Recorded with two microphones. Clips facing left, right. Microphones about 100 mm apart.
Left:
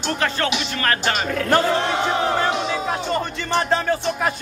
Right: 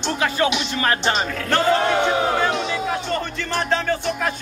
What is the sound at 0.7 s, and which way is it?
Speech, 20° right (ahead or behind).